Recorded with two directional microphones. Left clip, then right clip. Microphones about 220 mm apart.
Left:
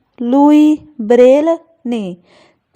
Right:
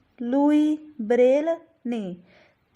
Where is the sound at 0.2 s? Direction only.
35° left (ahead or behind).